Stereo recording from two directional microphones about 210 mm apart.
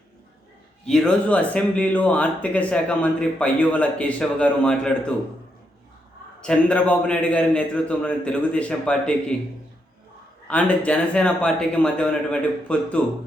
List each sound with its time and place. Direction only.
0.9 s speech: 5° left (ahead or behind)
6.4 s speech: 5° left (ahead or behind)
10.5 s speech: 5° left (ahead or behind)